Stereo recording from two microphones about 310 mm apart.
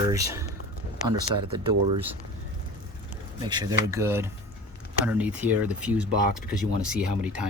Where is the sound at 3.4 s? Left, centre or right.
Centre.